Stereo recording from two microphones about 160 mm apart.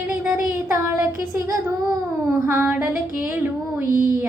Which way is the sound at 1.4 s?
20° right (ahead or behind).